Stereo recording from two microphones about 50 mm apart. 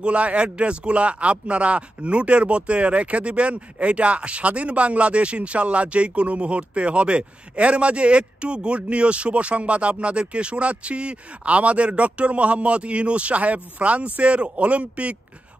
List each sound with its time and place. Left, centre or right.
0.0 s speech: right